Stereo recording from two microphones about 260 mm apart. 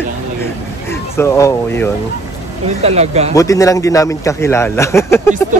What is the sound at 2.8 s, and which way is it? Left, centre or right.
Speech, right.